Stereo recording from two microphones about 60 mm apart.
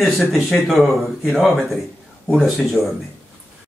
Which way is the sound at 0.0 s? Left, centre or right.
Centre.